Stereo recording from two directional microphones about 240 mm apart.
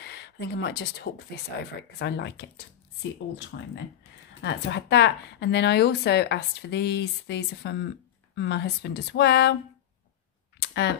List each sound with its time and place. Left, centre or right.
0.0 s a sound: left
1.3 s speech: left
3.5 s speech: left
10.6 s speech: left